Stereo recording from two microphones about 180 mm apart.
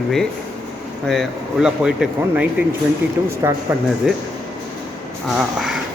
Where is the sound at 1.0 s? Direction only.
Centre (ahead or behind); by 3.6 s 15° right (ahead or behind).